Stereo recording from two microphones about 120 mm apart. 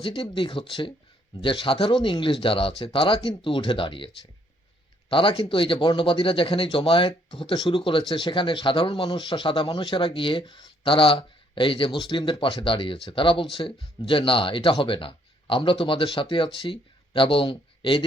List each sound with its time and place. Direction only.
0.0 s speech: 45° left (ahead or behind)